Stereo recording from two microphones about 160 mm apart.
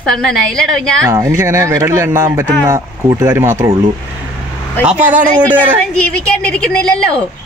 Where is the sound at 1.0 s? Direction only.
20° right (ahead or behind).